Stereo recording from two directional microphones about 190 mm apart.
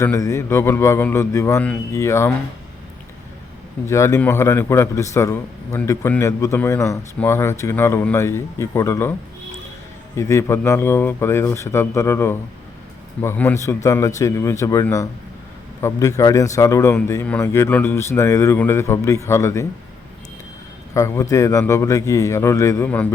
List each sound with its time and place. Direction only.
0.0 s a man's voice: 15° left (ahead or behind)
3.8 s a man's voice: 15° left (ahead or behind)
10.2 s a man's voice: 15° left (ahead or behind)
20.9 s a man's voice: 15° left (ahead or behind)